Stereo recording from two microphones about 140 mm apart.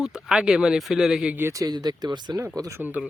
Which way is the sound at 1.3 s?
20° right (ahead or behind).